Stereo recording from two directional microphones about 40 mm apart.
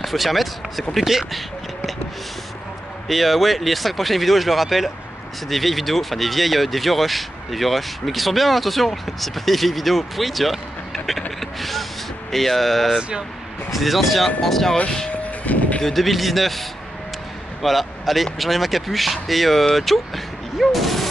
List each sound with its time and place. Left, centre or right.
0.0 s speech: centre
3.1 s speech: centre
12.3 s speech: centre
15.4 s vehicle: left
15.8 s speech: centre
20.5 s fusillade: centre